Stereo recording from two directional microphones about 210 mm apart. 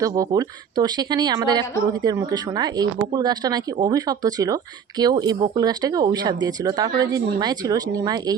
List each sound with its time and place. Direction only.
0.0 s speech: 15° right (ahead or behind)